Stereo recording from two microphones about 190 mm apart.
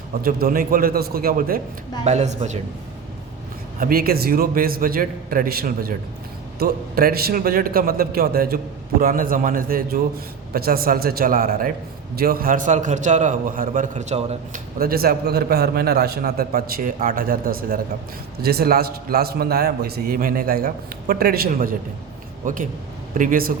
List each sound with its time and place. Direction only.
0.3 s a man's voice: 50° right (ahead or behind)
2.0 s a man's voice: 35° right (ahead or behind)
3.8 s a man's voice: 50° right (ahead or behind); by 14.6 s 35° right (ahead or behind)
14.8 s a man's voice: 50° right (ahead or behind)